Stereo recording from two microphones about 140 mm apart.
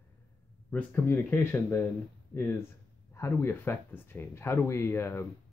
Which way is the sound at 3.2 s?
20° left (ahead or behind).